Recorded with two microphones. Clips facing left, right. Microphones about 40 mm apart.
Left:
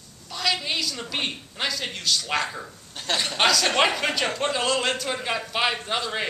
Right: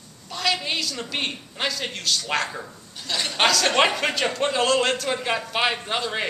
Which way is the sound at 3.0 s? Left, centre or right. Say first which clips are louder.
Left 4 dB; left.